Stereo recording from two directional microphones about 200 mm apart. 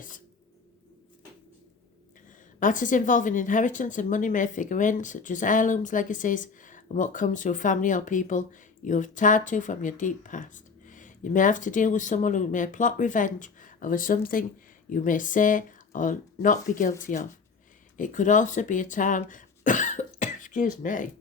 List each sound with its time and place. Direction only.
2.6 s speech: 40° left (ahead or behind)